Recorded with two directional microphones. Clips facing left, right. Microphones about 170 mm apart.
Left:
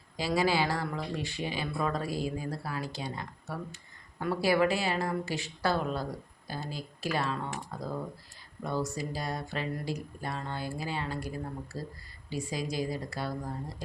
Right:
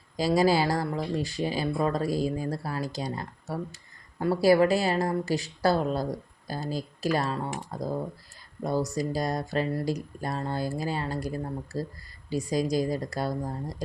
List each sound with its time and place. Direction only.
0.2 s speech: 40° right (ahead or behind)